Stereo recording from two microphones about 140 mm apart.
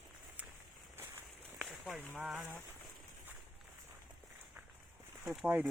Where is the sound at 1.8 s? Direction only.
10° left (ahead or behind).